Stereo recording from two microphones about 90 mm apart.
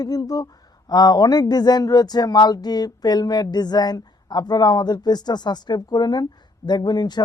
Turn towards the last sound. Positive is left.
turn(degrees=50)  # may be behind; listen again after turning